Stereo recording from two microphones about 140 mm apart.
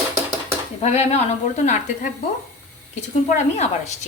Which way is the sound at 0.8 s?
50° left (ahead or behind).